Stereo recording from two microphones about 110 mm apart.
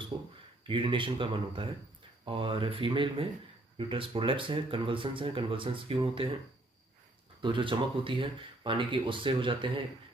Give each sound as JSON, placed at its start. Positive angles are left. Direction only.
{"t": 0.1, "sound": "a sound", "side_deg": -40}
{"t": 0.7, "sound": "speech", "side_deg": -50}
{"t": 7.4, "sound": "speech", "side_deg": -50}